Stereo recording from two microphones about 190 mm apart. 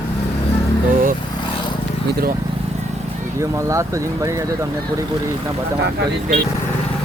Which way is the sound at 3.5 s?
15° right (ahead or behind).